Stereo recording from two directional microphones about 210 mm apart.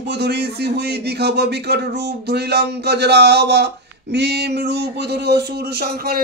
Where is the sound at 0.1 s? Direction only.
50° right (ahead or behind).